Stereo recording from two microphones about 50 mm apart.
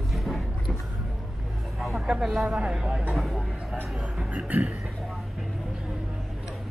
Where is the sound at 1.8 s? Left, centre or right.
Centre.